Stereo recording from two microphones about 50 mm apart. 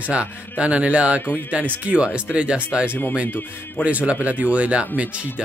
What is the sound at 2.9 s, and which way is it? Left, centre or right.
Speech, left.